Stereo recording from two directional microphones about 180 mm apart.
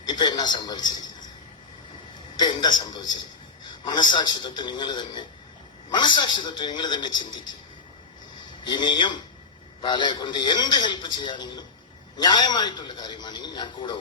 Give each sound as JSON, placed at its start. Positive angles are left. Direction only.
{"t": 0.0, "sound": "a man's voice", "side_deg": 25}
{"t": 2.4, "sound": "a man's voice", "side_deg": 25}
{"t": 8.6, "sound": "a man's voice", "side_deg": 25}